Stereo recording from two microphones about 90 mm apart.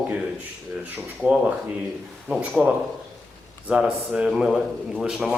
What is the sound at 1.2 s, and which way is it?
Speech, 15° right (ahead or behind).